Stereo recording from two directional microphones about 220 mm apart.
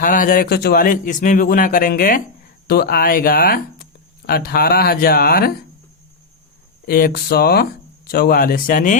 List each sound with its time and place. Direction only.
0.0 s a man's voice: 40° left (ahead or behind)
6.8 s speech: 45° left (ahead or behind)